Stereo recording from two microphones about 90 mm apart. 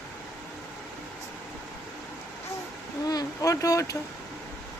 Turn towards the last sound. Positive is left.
turn(degrees=40)  # may be behind; listen again after turning